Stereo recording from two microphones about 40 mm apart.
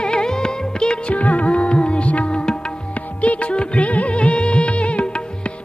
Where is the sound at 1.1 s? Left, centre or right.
Left.